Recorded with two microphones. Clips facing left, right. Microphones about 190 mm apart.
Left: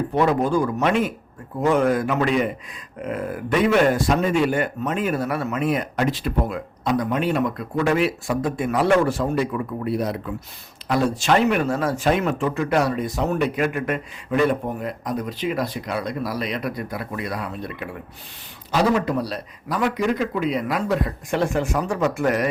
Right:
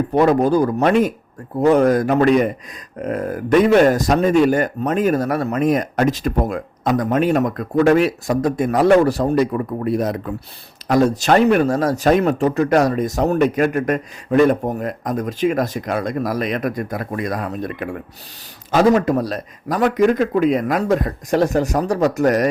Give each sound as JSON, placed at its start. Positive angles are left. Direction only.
{"t": 0.1, "sound": "a man's voice", "side_deg": -40}